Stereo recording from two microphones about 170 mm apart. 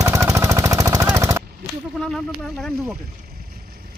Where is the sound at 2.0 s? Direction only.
Centre (ahead or behind).